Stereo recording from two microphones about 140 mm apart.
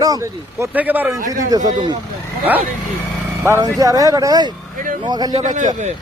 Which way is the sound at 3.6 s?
25° right (ahead or behind).